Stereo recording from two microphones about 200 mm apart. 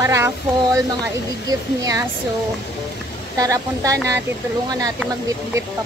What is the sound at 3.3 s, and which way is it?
Speech, 15° right (ahead or behind).